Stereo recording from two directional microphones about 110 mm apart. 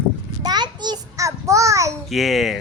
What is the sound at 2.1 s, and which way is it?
Speech, centre (ahead or behind).